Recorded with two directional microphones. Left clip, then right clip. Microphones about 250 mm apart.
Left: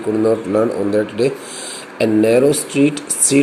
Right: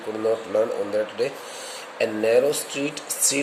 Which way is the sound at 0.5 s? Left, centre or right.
Centre.